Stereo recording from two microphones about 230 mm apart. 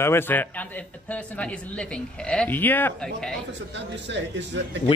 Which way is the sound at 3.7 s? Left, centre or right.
Right.